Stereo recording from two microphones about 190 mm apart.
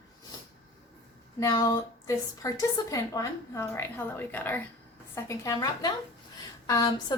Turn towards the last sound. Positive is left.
turn(degrees=20)  # may be behind; listen again after turning